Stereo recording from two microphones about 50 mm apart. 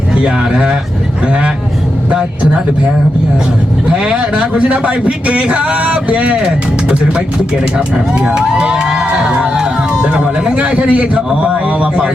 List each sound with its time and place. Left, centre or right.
0.2 s a man's voice: right
3.8 s a man's voice: right